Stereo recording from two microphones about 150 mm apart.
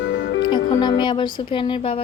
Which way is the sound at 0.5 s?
30° left (ahead or behind).